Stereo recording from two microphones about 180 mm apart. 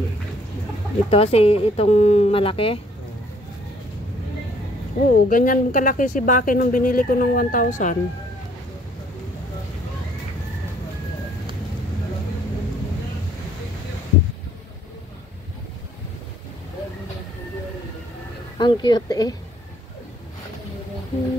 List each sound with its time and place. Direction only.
1.1 s speech: 35° left (ahead or behind)
5.0 s speech: 50° left (ahead or behind)
18.6 s speech: 25° left (ahead or behind)